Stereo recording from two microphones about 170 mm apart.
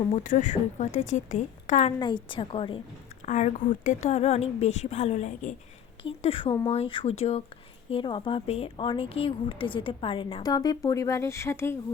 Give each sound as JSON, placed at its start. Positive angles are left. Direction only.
{"t": 0.1, "sound": "a woman's voice", "side_deg": 45}
{"t": 2.3, "sound": "speech", "side_deg": 30}
{"t": 3.2, "sound": "a woman's voice", "side_deg": 45}
{"t": 6.0, "sound": "a sound", "side_deg": 35}
{"t": 6.7, "sound": "a woman's voice", "side_deg": 35}